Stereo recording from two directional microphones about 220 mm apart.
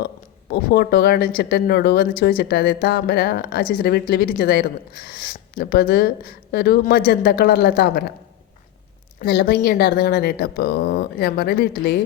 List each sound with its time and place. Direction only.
0.5 s speech: 45° left (ahead or behind)
9.1 s a woman's voice: 45° left (ahead or behind)